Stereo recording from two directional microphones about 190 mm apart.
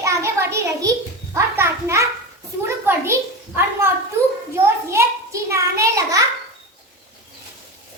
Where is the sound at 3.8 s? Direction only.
15° right (ahead or behind).